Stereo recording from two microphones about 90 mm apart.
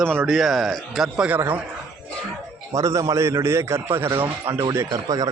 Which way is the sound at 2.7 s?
35° right (ahead or behind).